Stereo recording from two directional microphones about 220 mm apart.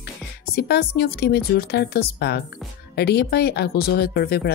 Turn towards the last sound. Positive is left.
turn(degrees=45)  # may be behind; listen again after turning